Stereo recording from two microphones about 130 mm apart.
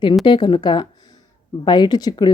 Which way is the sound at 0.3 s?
35° left (ahead or behind).